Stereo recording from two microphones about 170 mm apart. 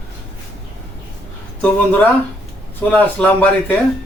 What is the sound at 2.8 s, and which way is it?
Speech, 10° left (ahead or behind).